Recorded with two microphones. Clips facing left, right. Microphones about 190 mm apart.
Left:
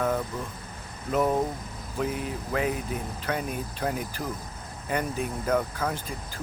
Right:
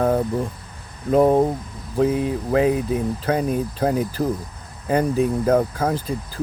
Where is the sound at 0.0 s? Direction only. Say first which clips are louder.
Right 8 dB; 35° right (ahead or behind).